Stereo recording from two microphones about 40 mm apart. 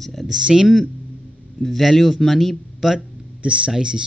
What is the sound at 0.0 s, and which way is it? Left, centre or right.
Speech, centre.